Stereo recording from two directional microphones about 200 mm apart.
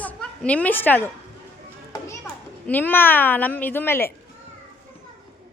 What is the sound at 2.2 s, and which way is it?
A child's voice, 10° left (ahead or behind).